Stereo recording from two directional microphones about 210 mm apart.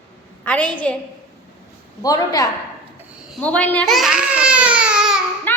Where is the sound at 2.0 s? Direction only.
15° left (ahead or behind).